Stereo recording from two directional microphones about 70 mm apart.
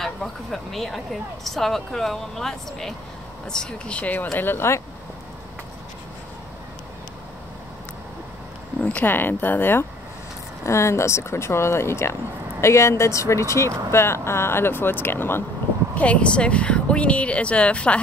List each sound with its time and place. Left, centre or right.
0.0 s speech: centre; by 4.3 s left
4.4 s speech: left
8.8 s speech: left
10.6 s speech: left
15.9 s speech: centre